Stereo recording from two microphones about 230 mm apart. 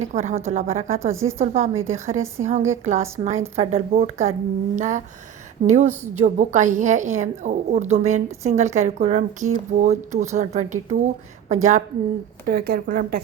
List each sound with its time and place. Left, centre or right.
0.1 s a woman's voice: right
1.1 s a woman's voice: centre
1.4 s a woman's voice: right